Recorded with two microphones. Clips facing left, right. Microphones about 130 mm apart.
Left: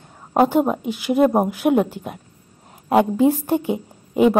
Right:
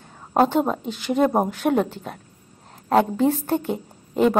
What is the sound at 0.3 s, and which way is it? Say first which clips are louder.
A woman's voice: left 2 dB; 10° left (ahead or behind).